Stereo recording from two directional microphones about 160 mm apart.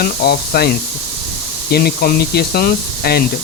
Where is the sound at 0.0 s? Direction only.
75° left (ahead or behind).